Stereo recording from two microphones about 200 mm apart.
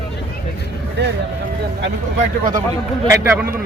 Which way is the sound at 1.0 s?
60° right (ahead or behind).